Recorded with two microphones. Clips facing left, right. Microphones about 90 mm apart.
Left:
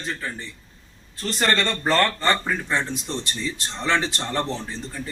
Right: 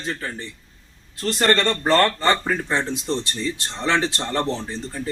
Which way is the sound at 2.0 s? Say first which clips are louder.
Right 2 dB; 30° right (ahead or behind).